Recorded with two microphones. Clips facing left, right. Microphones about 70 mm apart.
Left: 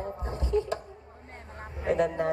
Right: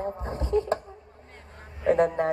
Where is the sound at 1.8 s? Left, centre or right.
Right.